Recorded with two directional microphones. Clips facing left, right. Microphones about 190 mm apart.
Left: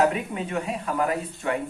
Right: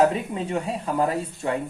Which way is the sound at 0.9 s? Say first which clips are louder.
Right 2 dB; 25° right (ahead or behind).